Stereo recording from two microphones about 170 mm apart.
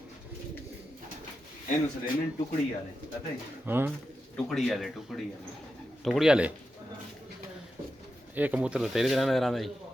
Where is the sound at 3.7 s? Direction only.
10° right (ahead or behind).